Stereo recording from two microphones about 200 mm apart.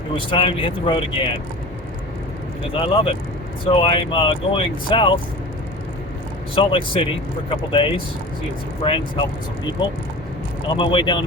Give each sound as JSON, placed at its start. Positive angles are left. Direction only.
{"t": 0.3, "sound": "speech", "side_deg": 25}
{"t": 2.7, "sound": "speech", "side_deg": 25}
{"t": 6.6, "sound": "speech", "side_deg": 25}
{"t": 10.8, "sound": "speech", "side_deg": 25}